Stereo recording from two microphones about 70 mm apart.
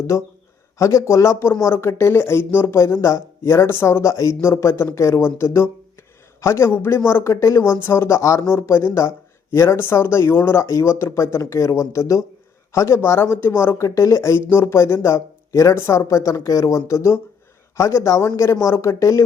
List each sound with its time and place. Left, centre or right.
0.1 s speech: left
13.8 s speech: left